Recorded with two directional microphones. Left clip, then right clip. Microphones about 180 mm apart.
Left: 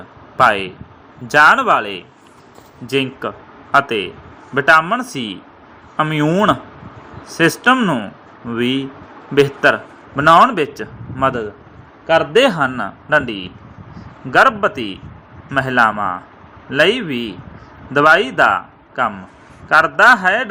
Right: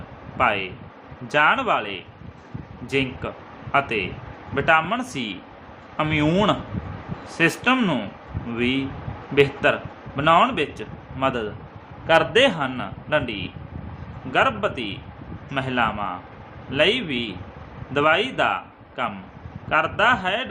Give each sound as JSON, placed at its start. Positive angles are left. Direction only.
{"t": 0.3, "sound": "a man's voice", "side_deg": 30}
{"t": 12.3, "sound": "a man's voice", "side_deg": 30}